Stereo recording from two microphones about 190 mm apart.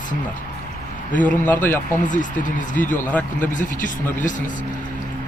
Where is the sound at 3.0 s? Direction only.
10° left (ahead or behind).